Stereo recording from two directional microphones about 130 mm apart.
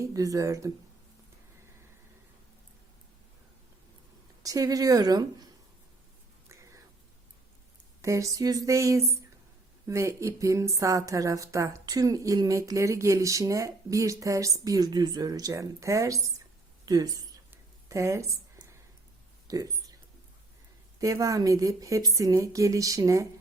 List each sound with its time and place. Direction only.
0.0 s a woman's voice: 25° right (ahead or behind)
4.4 s a woman's voice: 25° right (ahead or behind)
6.5 s a sound: 20° right (ahead or behind)
8.0 s a woman's voice: 25° right (ahead or behind)
17.8 s a sound: 25° right (ahead or behind)
19.5 s whispering: 30° right (ahead or behind)
21.0 s a woman's voice: 25° right (ahead or behind)